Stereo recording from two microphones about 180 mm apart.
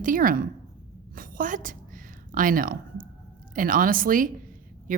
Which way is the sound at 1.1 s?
50° right (ahead or behind).